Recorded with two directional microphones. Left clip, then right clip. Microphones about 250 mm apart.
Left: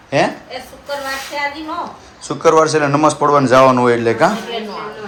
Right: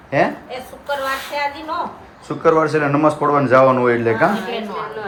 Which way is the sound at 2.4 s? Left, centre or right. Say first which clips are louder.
Left 3 dB; centre.